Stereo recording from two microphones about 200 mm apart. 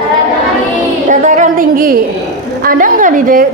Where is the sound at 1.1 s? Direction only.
40° right (ahead or behind).